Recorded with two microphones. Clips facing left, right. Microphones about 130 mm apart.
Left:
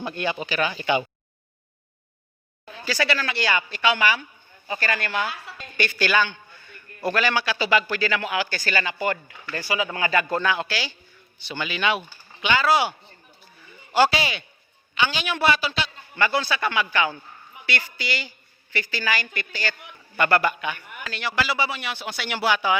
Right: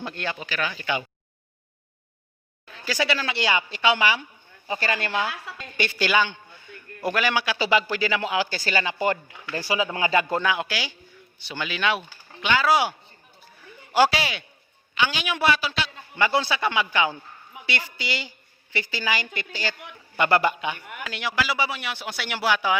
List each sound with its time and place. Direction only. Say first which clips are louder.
0.0 s speech: left 4 dB; 10° left (ahead or behind)
0.3 s speech: left 4 dB; 20° left (ahead or behind)
3.0 s a woman's voice: even; 20° right (ahead or behind)
10.4 s a man's voice: left 1 dB; 10° right (ahead or behind)
16.1 s a woman's voice: right 1 dB; 20° right (ahead or behind); by 22.8 s centre (ahead or behind)